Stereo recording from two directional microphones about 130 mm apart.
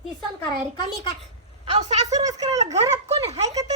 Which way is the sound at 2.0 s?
30° right (ahead or behind).